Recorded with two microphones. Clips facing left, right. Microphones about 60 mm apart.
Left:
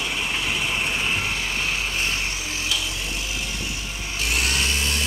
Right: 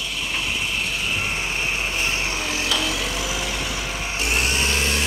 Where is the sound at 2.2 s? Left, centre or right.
Right.